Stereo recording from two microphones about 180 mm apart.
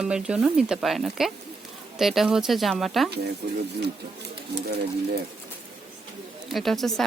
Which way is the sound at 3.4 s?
65° right (ahead or behind).